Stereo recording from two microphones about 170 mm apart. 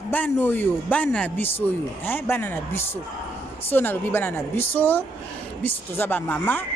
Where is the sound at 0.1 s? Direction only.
10° left (ahead or behind).